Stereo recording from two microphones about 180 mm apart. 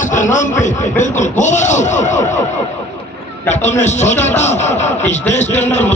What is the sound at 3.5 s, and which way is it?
Speech, 40° left (ahead or behind).